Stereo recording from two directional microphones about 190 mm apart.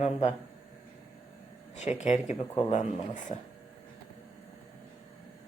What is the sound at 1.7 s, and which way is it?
A woman's voice, 40° left (ahead or behind).